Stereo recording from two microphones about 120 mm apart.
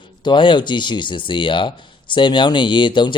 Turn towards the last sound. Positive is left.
turn(degrees=40)  # may be behind; listen again after turning